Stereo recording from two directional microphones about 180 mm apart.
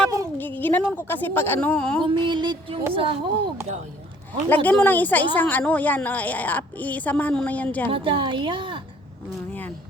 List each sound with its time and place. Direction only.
0.3 s a woman's voice: 10° left (ahead or behind)
2.0 s a woman's voice: 30° right (ahead or behind)
4.4 s a woman's voice: 10° left (ahead or behind)
7.9 s a woman's voice: 30° right (ahead or behind)